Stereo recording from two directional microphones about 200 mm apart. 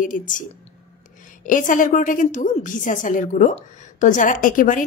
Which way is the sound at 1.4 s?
40° left (ahead or behind).